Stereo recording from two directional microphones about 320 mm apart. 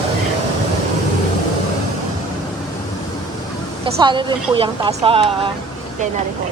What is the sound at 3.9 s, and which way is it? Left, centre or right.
Speech, centre.